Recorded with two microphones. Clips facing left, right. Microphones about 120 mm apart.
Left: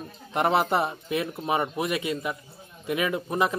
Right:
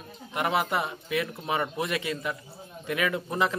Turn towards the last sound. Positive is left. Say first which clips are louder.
# left 2 dB
turn(degrees=20)  # may be behind; listen again after turning